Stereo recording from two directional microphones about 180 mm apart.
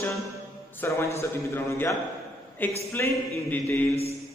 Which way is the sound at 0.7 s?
15° left (ahead or behind).